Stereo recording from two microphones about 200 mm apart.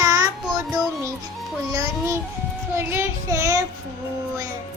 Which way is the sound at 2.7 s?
10° right (ahead or behind).